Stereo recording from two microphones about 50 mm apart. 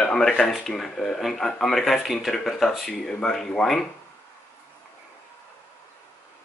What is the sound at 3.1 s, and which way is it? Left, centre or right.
Speech, centre.